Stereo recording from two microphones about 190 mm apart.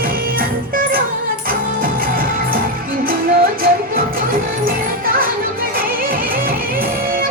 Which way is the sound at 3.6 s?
50° right (ahead or behind).